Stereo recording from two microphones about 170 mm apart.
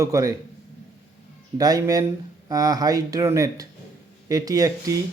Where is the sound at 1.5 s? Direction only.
20° right (ahead or behind).